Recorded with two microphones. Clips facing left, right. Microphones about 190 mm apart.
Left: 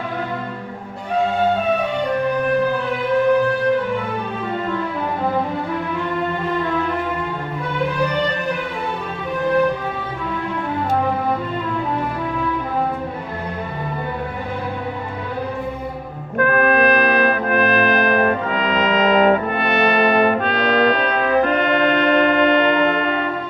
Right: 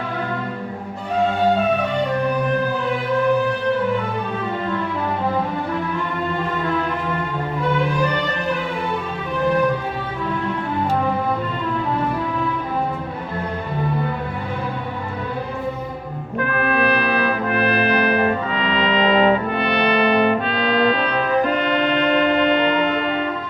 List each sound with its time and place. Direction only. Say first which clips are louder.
16.4 s trumpet: left 5 dB; 50° left (ahead or behind)